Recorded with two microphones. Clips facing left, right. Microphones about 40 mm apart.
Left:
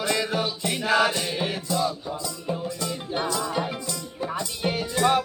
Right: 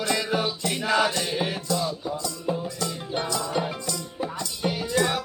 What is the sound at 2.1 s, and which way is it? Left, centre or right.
Music, centre.